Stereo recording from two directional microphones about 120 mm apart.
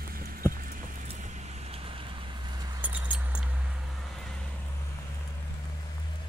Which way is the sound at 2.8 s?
15° right (ahead or behind).